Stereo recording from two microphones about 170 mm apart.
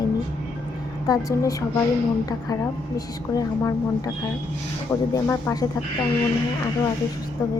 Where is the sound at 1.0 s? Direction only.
20° left (ahead or behind).